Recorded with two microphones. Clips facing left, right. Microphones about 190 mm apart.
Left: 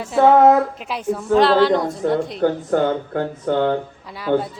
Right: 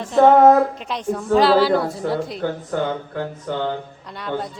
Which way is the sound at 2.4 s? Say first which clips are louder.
Left 5 dB; 50° left (ahead or behind).